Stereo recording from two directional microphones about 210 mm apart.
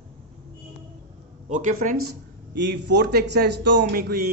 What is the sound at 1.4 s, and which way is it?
Speech, 35° right (ahead or behind).